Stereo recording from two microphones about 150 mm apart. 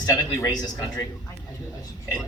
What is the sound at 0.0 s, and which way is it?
A man's voice, 20° left (ahead or behind).